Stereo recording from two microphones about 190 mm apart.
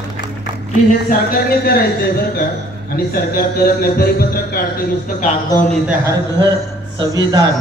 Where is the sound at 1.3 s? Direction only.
55° left (ahead or behind).